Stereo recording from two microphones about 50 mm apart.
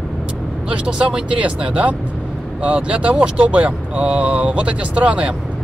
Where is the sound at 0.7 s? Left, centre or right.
Right.